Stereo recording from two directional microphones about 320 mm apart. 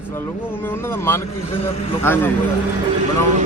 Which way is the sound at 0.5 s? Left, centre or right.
Centre.